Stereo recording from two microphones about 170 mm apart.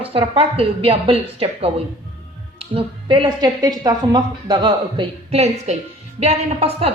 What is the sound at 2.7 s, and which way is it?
A woman's voice, 30° right (ahead or behind).